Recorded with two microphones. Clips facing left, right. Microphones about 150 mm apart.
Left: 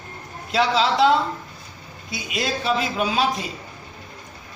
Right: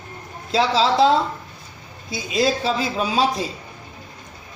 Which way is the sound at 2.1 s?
30° right (ahead or behind).